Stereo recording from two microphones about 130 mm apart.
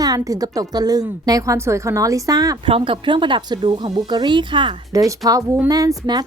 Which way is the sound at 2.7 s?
40° right (ahead or behind).